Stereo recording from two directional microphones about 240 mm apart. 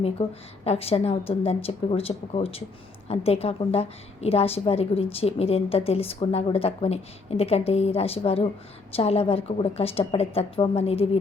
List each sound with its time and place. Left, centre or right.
0.0 s a woman's voice: left